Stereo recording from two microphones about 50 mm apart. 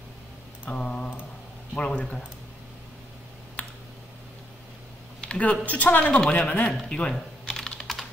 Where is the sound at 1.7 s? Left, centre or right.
Left.